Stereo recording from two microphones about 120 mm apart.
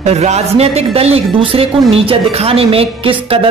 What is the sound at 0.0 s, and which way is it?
Speech, 65° right (ahead or behind).